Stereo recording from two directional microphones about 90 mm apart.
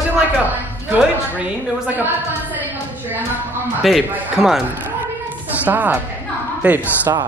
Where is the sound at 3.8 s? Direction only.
Centre (ahead or behind).